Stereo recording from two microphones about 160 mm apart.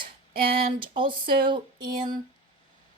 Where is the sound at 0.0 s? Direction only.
70° right (ahead or behind).